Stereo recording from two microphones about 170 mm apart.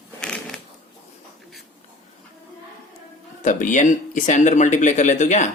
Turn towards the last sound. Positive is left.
turn(degrees=45)  # may be behind; listen again after turning